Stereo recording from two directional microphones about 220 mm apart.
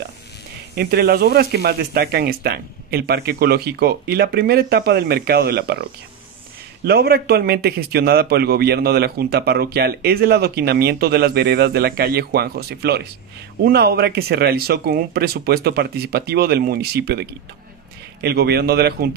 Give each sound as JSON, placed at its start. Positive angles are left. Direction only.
{"t": 0.7, "sound": "a man's voice", "side_deg": -45}